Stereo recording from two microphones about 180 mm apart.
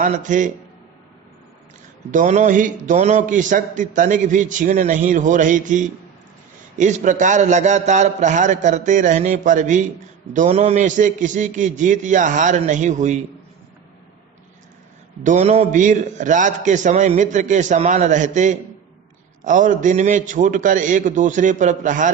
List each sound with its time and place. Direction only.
0.0 s a man's voice: 45° right (ahead or behind)
2.0 s a man's voice: 45° right (ahead or behind)
15.2 s a man's voice: 40° right (ahead or behind)